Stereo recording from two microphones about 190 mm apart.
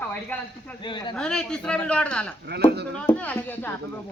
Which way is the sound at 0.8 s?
25° left (ahead or behind).